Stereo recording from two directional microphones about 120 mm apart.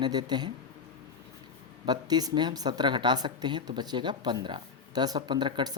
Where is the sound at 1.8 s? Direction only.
35° right (ahead or behind).